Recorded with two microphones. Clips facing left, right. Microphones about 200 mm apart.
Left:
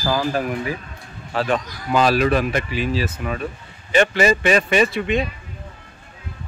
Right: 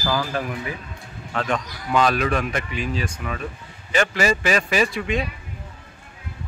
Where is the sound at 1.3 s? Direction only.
30° left (ahead or behind).